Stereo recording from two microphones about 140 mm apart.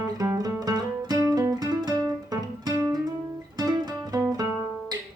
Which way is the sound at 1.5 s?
30° right (ahead or behind).